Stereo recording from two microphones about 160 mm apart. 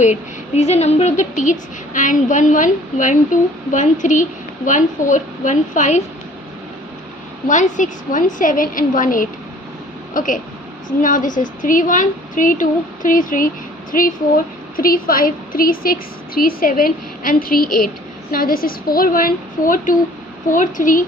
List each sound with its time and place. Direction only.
0.0 s a woman's voice: 45° left (ahead or behind)
7.4 s a woman's voice: 50° left (ahead or behind)
14.8 s a woman's voice: 65° left (ahead or behind)